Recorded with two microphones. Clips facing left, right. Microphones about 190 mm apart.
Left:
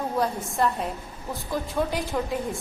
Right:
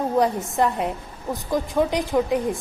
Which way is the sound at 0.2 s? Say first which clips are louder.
Right 4 dB; 20° right (ahead or behind).